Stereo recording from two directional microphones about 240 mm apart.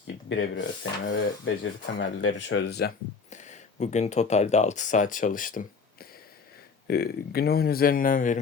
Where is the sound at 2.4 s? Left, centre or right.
Left.